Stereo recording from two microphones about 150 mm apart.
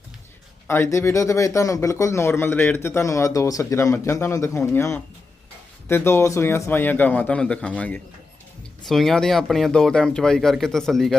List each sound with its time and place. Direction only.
0.7 s speech: 15° left (ahead or behind)